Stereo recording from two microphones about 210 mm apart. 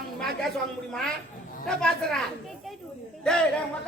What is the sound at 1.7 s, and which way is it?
Speech, 5° left (ahead or behind).